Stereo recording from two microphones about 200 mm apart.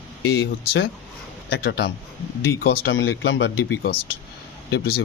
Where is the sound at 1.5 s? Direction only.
60° left (ahead or behind).